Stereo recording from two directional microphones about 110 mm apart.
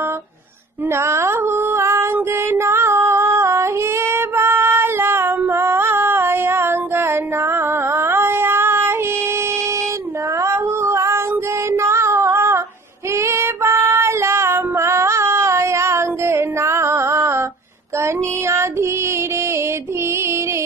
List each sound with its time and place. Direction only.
0.9 s female singing: 25° right (ahead or behind)
10.4 s music: 25° right (ahead or behind)
11.7 s female singing: 25° right (ahead or behind)
18.0 s music: 25° right (ahead or behind)